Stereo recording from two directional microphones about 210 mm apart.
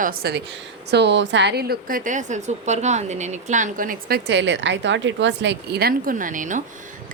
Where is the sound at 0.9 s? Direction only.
55° right (ahead or behind).